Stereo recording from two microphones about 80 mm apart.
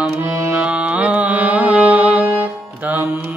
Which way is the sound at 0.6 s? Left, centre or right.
Centre.